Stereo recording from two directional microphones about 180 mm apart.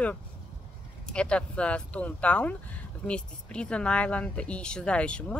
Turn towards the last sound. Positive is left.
turn(degrees=5)  # may be behind; listen again after turning